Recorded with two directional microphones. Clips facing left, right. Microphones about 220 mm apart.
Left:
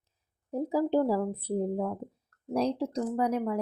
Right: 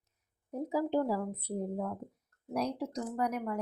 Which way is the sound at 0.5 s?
35° left (ahead or behind).